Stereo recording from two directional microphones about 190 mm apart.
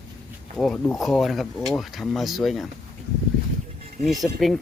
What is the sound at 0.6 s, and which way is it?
Speech, 5° left (ahead or behind).